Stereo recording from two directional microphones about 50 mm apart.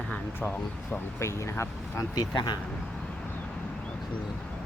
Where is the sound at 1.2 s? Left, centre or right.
Left.